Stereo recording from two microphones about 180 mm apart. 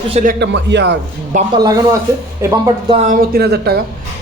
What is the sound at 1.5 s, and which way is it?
A man's voice, 20° right (ahead or behind).